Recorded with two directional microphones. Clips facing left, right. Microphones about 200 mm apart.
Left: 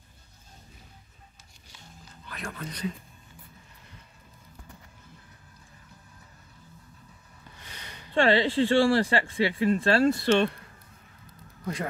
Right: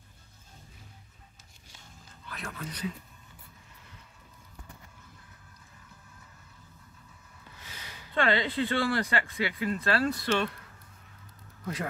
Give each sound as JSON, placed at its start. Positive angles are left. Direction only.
{"t": 2.2, "sound": "speech", "side_deg": 0}
{"t": 7.6, "sound": "a sound", "side_deg": -5}
{"t": 8.1, "sound": "speech", "side_deg": 30}